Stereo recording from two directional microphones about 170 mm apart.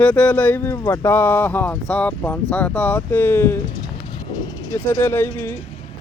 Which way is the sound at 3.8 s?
25° left (ahead or behind).